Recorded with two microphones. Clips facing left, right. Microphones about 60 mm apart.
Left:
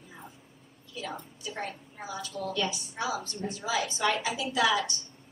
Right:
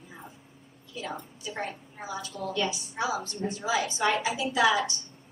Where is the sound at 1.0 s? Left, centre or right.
Centre.